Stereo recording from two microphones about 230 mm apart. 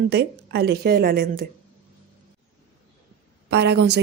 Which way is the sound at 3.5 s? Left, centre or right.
Right.